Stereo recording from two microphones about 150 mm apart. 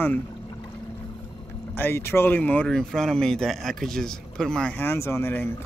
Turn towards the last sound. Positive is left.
turn(degrees=15)  # may be behind; listen again after turning